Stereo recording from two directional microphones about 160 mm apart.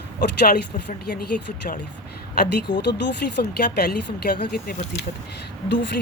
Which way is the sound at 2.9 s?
90° left.